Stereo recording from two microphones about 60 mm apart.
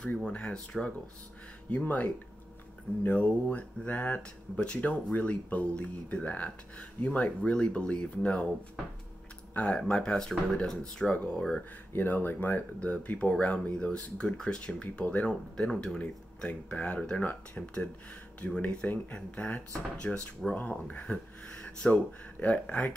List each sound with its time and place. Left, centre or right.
0.3 s speech: centre
9.5 s speech: left
11.9 s speech: left
20.4 s speech: centre
20.8 s speech: left